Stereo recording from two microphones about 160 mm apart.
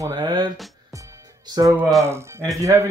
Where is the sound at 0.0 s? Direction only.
25° right (ahead or behind).